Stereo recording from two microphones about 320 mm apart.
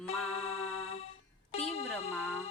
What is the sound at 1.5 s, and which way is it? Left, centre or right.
Music, centre.